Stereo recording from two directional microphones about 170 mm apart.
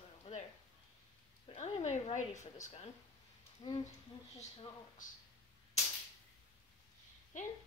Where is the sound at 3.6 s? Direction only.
35° left (ahead or behind).